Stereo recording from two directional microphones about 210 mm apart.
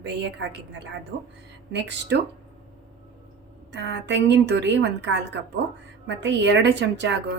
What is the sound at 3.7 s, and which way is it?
A woman's voice, 55° right (ahead or behind).